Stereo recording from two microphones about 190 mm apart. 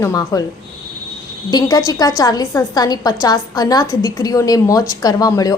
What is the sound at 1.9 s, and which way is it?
A woman's voice, 20° left (ahead or behind).